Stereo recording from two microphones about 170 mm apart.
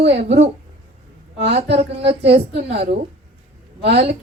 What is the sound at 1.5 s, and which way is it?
Speech, 75° right (ahead or behind).